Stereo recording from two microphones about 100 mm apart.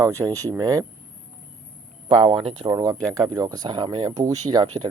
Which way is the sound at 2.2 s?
85° right.